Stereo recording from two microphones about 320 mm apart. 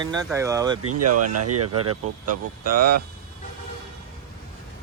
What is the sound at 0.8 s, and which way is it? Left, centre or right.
Speech, right.